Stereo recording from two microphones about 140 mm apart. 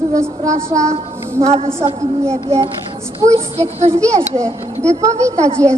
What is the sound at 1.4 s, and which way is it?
Speech, 45° right (ahead or behind).